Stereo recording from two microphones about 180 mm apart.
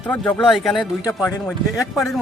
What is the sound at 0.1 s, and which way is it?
Speech, 5° left (ahead or behind).